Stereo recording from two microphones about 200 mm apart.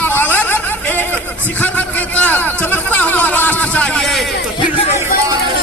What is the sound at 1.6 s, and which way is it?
A man's voice, 10° left (ahead or behind).